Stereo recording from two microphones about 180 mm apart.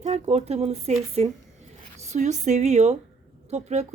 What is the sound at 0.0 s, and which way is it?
Speech, 40° right (ahead or behind).